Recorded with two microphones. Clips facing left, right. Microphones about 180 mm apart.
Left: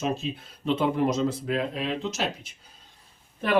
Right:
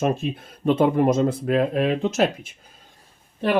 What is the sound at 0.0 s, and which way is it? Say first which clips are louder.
Speech: right 6 dB; 55° right (ahead or behind).